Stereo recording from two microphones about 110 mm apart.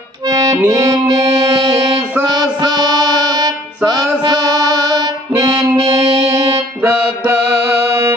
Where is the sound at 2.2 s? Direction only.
40° right (ahead or behind).